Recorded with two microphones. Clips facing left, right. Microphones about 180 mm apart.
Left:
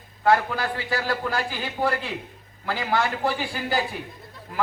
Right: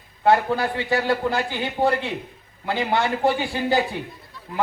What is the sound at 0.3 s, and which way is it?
Speech, 25° right (ahead or behind).